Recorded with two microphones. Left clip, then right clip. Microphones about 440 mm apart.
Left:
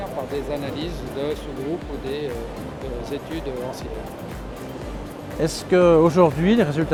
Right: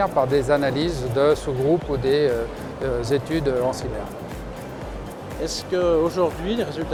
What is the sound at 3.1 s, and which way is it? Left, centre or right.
Speech, right.